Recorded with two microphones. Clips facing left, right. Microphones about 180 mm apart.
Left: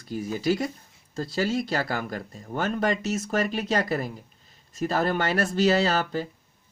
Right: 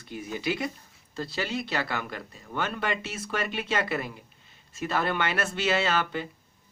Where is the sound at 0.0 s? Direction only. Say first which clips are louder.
Left 5 dB; 40° left (ahead or behind).